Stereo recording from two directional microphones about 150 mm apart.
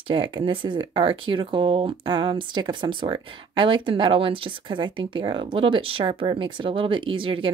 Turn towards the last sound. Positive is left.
turn(degrees=-35)  # may be behind; listen again after turning